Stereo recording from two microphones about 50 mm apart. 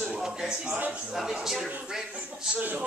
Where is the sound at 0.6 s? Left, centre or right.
Right.